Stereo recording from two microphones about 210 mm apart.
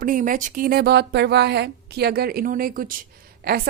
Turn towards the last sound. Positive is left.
turn(degrees=-45)  # may be behind; listen again after turning